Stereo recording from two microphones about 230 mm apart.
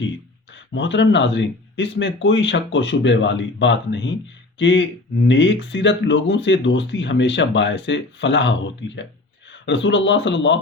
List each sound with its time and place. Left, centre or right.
0.7 s speech: left